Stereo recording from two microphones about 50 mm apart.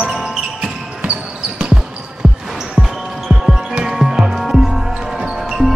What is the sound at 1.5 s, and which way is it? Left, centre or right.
Basketball bounce, right.